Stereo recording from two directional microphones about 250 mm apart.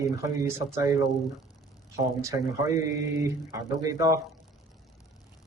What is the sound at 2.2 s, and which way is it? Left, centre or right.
A man's voice, centre.